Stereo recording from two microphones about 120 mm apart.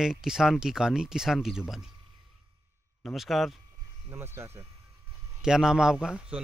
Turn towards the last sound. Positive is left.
turn(degrees=-5)  # may be behind; listen again after turning